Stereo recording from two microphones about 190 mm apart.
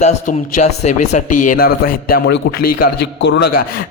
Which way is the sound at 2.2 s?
65° left (ahead or behind).